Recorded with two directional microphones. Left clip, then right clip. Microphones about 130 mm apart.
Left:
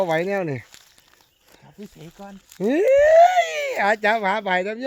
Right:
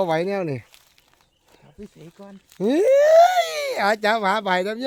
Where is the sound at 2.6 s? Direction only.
20° right (ahead or behind).